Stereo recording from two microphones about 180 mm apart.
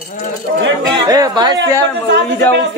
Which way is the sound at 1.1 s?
20° right (ahead or behind).